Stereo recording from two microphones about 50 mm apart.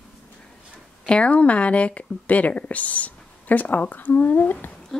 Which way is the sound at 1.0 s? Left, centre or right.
Left.